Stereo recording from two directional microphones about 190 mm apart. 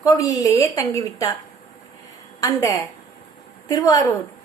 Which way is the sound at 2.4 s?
15° left (ahead or behind).